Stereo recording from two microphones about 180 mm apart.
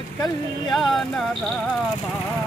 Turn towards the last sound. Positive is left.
turn(degrees=0)  # may be behind; listen again after turning